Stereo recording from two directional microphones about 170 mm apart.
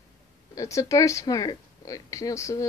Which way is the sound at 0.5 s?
20° left (ahead or behind).